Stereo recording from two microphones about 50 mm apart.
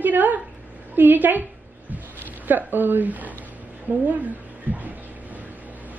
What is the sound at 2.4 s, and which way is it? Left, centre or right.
A woman's voice, right.